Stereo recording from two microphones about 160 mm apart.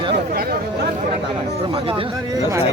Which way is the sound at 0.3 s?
75° right (ahead or behind).